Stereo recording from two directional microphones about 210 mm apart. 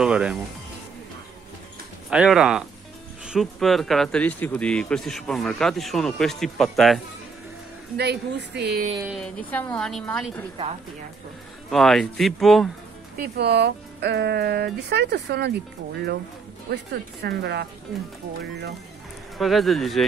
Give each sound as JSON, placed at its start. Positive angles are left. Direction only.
{"t": 0.0, "sound": "speech", "side_deg": -5}
{"t": 2.0, "sound": "speech", "side_deg": -5}
{"t": 8.0, "sound": "speech", "side_deg": -50}
{"t": 9.0, "sound": "speech", "side_deg": 0}
{"t": 11.7, "sound": "speech", "side_deg": 0}
{"t": 13.2, "sound": "speech", "side_deg": -50}
{"t": 16.7, "sound": "speech", "side_deg": -50}
{"t": 19.3, "sound": "speech", "side_deg": 0}